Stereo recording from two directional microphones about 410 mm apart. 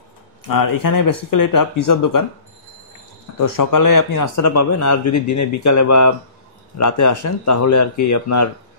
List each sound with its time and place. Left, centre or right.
0.5 s speech: left
3.3 s speech: left